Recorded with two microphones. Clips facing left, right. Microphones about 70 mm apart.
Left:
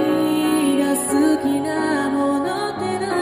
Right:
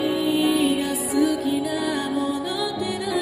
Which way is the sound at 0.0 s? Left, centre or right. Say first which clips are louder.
Left 3 dB; left.